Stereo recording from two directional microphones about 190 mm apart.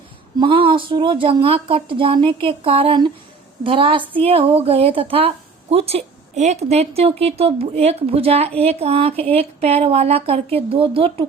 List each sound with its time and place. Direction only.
0.3 s a woman's voice: 25° right (ahead or behind)